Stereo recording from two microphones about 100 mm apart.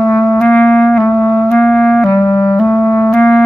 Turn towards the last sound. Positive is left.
turn(degrees=10)  # may be behind; listen again after turning